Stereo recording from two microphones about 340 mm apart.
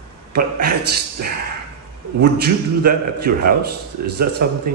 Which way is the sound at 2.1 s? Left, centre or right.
Right.